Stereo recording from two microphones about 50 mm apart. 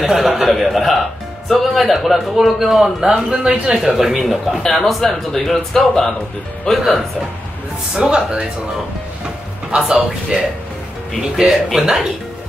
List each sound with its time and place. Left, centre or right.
0.0 s a man's voice: centre
7.9 s speech: centre
9.7 s a man's voice: centre
11.8 s speech: centre